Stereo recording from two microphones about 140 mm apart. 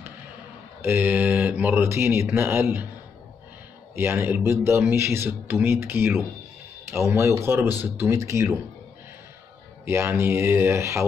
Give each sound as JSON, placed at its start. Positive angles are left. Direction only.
{"t": 0.8, "sound": "speech", "side_deg": -15}
{"t": 3.9, "sound": "speech", "side_deg": -15}
{"t": 9.8, "sound": "speech", "side_deg": -15}